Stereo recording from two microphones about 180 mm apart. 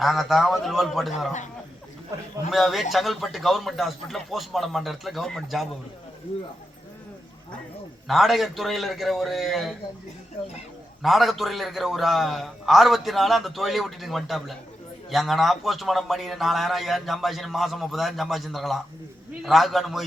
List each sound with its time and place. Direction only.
0.0 s a man's voice: centre (ahead or behind)
2.5 s a man's voice: centre (ahead or behind)
8.0 s a man's voice: centre (ahead or behind)
11.0 s a man's voice: centre (ahead or behind)